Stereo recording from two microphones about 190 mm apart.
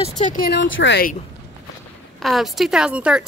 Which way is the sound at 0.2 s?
45° left (ahead or behind).